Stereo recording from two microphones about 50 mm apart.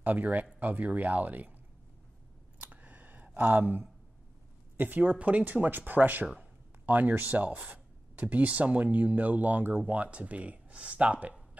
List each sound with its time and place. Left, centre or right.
0.0 s speech: right
2.6 s computer keyboard: right
3.3 s speech: right